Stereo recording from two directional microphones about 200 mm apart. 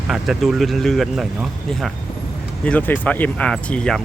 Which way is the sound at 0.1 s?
Centre (ahead or behind).